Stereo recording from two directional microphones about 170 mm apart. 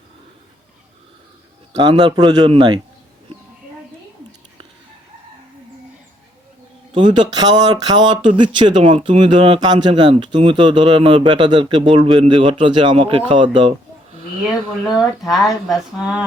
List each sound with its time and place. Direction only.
1.7 s speech: 25° right (ahead or behind)
7.2 s speech: 25° right (ahead or behind)
14.4 s speech: centre (ahead or behind)